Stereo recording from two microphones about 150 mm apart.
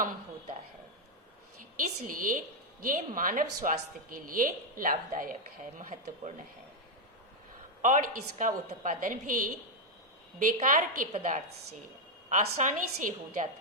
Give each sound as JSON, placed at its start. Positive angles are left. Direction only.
{"t": 1.7, "sound": "a woman's voice", "side_deg": -65}
{"t": 7.8, "sound": "a woman's voice", "side_deg": -60}
{"t": 12.3, "sound": "a woman's voice", "side_deg": -55}